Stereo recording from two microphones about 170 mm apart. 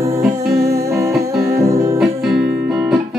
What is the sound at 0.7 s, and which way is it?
Music, 15° right (ahead or behind).